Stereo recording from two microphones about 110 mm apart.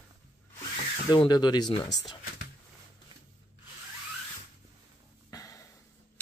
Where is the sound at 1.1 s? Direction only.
45° left (ahead or behind).